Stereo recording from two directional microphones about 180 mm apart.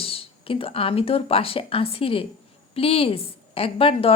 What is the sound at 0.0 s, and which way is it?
Speech, 30° left (ahead or behind).